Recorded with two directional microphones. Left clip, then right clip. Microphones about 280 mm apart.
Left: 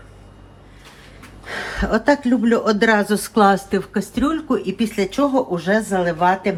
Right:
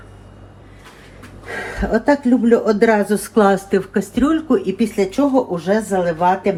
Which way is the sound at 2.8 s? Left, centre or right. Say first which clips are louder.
Right 2 dB; centre.